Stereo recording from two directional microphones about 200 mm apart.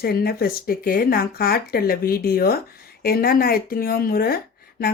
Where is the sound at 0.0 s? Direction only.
50° left (ahead or behind).